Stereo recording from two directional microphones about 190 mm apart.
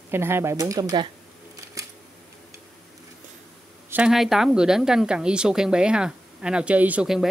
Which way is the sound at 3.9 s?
5° right (ahead or behind).